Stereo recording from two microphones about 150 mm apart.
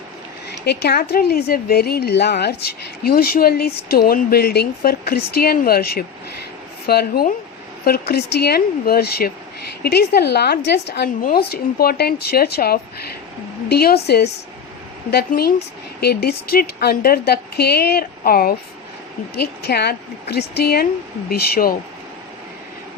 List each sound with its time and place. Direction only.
0.6 s a woman's voice: 90° left